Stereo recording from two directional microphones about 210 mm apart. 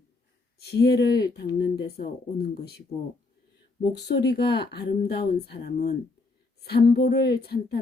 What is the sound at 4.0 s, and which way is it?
Speech, 50° left (ahead or behind).